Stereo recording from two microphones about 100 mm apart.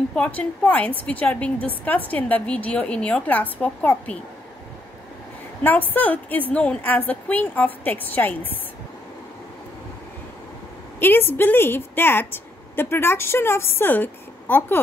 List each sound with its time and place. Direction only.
0.1 s a woman's voice: 15° left (ahead or behind)
5.6 s a woman's voice: 20° left (ahead or behind)
11.0 s a woman's voice: 20° left (ahead or behind)